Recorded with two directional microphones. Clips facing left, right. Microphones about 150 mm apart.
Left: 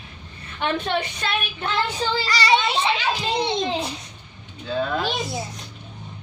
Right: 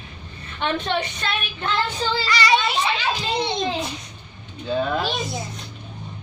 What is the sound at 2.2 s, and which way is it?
Speech, 35° left (ahead or behind).